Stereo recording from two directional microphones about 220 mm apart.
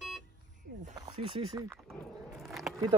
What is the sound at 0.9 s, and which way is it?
Speech, 20° right (ahead or behind).